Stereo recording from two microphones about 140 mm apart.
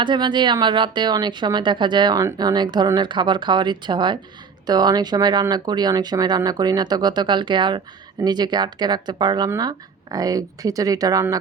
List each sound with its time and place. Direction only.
0.0 s speech: 35° right (ahead or behind)